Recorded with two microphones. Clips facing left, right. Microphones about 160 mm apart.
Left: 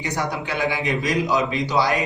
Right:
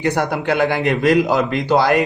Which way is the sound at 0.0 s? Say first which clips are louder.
Right 7 dB; 55° right (ahead or behind).